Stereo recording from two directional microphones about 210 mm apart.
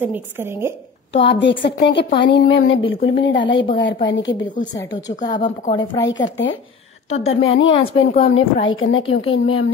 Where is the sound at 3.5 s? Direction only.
20° left (ahead or behind).